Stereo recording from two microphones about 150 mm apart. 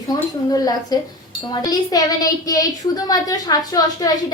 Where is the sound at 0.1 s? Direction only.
25° left (ahead or behind).